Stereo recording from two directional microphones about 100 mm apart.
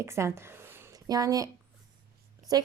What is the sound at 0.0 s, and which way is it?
Speech, 30° right (ahead or behind).